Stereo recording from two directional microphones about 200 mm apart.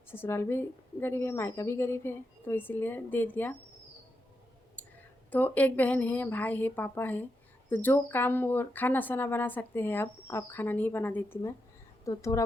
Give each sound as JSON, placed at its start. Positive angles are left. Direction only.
{"t": 0.1, "sound": "speech", "side_deg": 10}
{"t": 5.3, "sound": "speech", "side_deg": 10}